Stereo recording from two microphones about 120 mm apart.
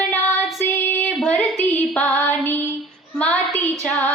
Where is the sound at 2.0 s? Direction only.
10° left (ahead or behind).